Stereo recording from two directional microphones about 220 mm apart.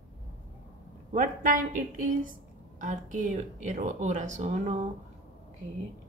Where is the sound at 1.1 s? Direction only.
35° right (ahead or behind).